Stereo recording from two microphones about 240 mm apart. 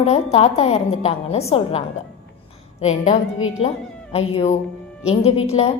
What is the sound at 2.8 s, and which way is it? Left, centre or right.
A woman's voice, left.